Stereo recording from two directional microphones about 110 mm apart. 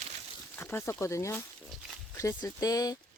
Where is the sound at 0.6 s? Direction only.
20° left (ahead or behind).